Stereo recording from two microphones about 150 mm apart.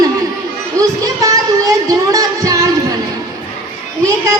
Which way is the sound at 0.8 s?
20° right (ahead or behind).